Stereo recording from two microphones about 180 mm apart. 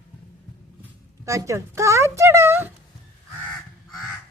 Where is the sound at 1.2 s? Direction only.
15° right (ahead or behind).